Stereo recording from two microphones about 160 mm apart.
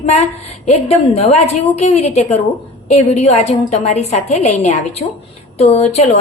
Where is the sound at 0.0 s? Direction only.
45° left (ahead or behind).